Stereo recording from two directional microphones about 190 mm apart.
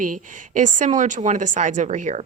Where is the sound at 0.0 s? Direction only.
45° right (ahead or behind).